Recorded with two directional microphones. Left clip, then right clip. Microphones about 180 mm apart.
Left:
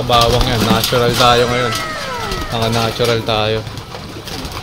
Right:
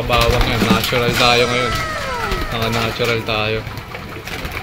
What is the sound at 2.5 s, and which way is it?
Speech, 10° left (ahead or behind).